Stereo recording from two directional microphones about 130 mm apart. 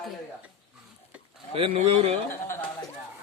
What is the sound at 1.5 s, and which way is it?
Speech, 50° right (ahead or behind).